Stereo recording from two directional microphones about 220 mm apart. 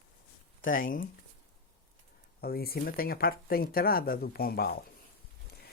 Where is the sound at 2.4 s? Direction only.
45° left (ahead or behind).